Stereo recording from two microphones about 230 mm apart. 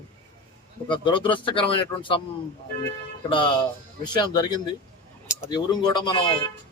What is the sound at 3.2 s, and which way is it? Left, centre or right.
Speech, left.